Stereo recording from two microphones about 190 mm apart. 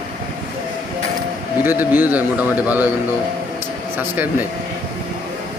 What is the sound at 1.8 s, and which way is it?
Speech, 10° right (ahead or behind).